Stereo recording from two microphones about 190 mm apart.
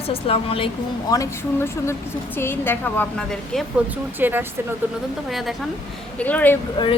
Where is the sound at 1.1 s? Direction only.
15° left (ahead or behind).